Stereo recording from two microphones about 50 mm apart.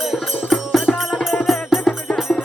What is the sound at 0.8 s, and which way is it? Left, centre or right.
Music, centre.